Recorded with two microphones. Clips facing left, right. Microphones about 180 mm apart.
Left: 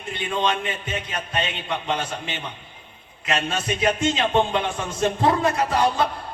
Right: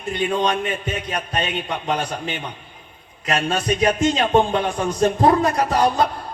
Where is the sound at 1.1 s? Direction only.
40° right (ahead or behind).